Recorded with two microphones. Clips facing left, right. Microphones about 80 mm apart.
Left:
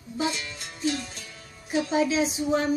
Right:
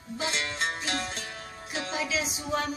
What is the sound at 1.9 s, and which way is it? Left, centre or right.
Speech, left.